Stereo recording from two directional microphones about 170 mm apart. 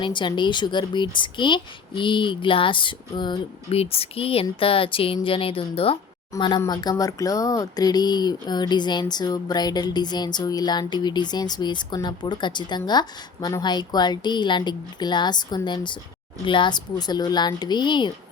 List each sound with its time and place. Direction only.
0.0 s speech: 30° left (ahead or behind)